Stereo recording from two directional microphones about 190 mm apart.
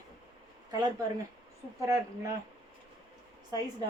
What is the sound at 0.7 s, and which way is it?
A woman's voice, 20° right (ahead or behind).